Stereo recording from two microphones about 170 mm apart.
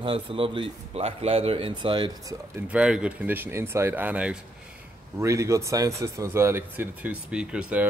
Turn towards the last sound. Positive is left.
turn(degrees=-5)  # may be behind; listen again after turning